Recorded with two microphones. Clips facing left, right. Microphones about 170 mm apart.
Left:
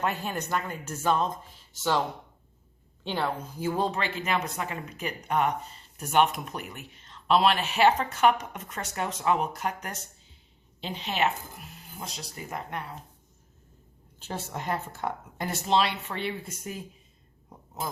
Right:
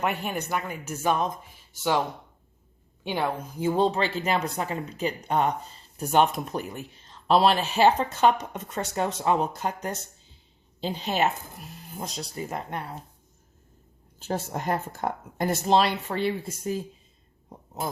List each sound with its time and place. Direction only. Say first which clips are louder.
0.0 s speech: right 2 dB; 15° right (ahead or behind); by 12.2 s 40° right (ahead or behind)
12.4 s speech: right 3 dB; 25° right (ahead or behind)
14.2 s speech: right 5 dB; 45° right (ahead or behind)